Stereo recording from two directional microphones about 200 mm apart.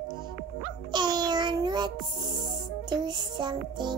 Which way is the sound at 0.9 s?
20° right (ahead or behind).